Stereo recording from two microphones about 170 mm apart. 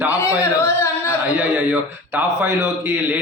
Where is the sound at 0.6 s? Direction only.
15° left (ahead or behind).